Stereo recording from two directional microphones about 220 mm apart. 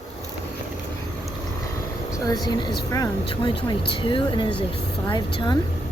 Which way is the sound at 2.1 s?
15° left (ahead or behind).